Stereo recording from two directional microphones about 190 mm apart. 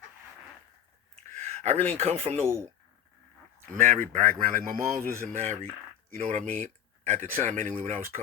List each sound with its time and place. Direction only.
1.3 s a sound: 35° right (ahead or behind)
2.0 s speech: 35° right (ahead or behind)
3.7 s a man's voice: 40° right (ahead or behind)